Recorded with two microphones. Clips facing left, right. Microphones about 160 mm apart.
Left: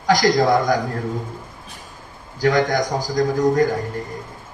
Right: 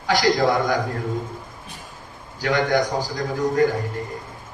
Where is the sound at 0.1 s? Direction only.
40° left (ahead or behind).